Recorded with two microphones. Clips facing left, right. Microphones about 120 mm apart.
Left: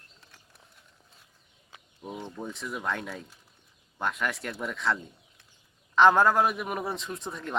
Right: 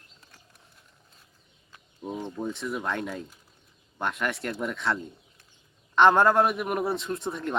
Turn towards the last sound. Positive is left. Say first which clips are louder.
# right 5 dB
turn(degrees=0)  # may be behind; listen again after turning